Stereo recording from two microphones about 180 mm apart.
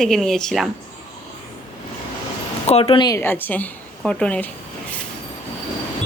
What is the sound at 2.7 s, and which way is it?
Speech, 30° left (ahead or behind).